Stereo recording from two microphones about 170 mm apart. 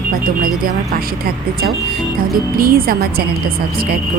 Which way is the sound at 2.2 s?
60° right (ahead or behind).